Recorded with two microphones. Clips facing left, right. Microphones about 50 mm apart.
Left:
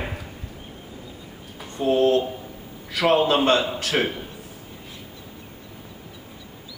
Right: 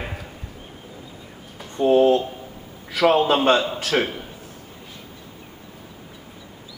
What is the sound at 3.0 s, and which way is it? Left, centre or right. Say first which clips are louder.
A man's voice: right 2 dB; centre.